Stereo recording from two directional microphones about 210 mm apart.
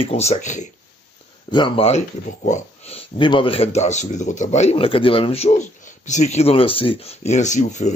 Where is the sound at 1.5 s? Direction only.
25° left (ahead or behind).